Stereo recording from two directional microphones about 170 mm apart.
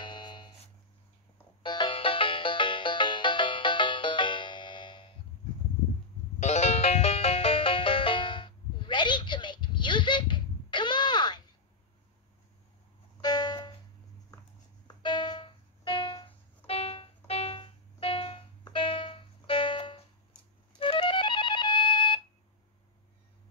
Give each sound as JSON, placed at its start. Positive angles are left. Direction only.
{"t": 0.0, "sound": "a sound", "side_deg": 25}
{"t": 1.6, "sound": "music", "side_deg": 25}
{"t": 6.4, "sound": "music", "side_deg": 40}
{"t": 13.2, "sound": "music", "side_deg": 25}
{"t": 14.9, "sound": "music", "side_deg": 25}